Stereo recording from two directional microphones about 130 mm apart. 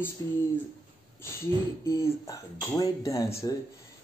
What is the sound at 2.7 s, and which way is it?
Speech, 25° left (ahead or behind).